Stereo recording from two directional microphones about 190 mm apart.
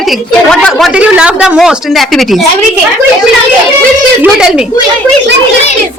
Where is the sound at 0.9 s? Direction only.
5° right (ahead or behind).